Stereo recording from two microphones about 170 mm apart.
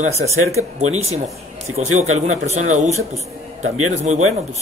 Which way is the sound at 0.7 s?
40° right (ahead or behind).